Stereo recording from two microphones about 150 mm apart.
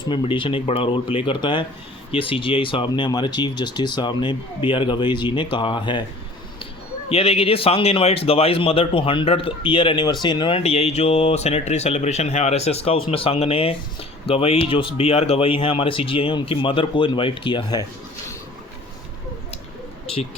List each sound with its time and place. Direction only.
0.1 s speech: 35° left (ahead or behind)
7.1 s speech: 40° left (ahead or behind)